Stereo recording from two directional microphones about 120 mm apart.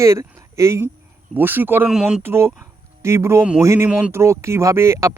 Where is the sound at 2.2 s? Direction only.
20° right (ahead or behind).